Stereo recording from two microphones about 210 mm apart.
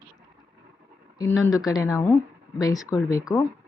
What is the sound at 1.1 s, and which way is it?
Speech, 15° left (ahead or behind).